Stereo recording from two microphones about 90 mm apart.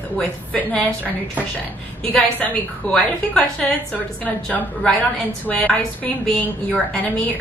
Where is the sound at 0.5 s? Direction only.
20° left (ahead or behind).